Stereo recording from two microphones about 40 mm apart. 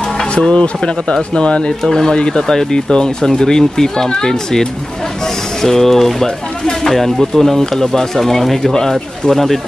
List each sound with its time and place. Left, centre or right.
0.3 s speech: left
1.8 s speech: centre